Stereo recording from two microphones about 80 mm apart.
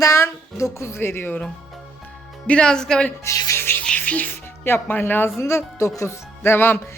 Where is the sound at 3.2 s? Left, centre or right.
Left.